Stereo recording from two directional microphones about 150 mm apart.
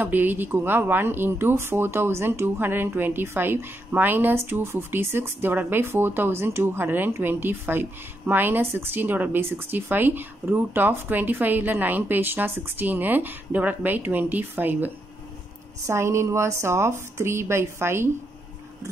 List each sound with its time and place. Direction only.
0.0 s speech: 10° right (ahead or behind)
15.9 s speech: 20° right (ahead or behind)